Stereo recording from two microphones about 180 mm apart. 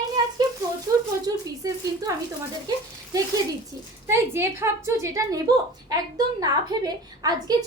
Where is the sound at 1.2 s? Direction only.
20° right (ahead or behind).